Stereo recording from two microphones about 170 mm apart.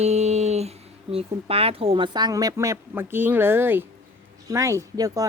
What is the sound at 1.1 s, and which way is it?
Speech, 35° right (ahead or behind).